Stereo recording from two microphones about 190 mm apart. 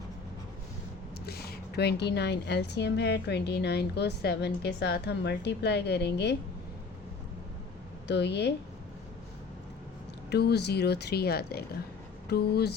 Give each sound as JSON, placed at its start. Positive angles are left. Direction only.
{"t": 1.3, "sound": "a woman's voice", "side_deg": 55}
{"t": 8.0, "sound": "a woman's voice", "side_deg": 65}
{"t": 10.2, "sound": "a woman's voice", "side_deg": 60}